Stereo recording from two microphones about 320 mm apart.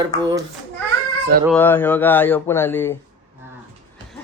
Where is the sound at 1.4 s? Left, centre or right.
Centre.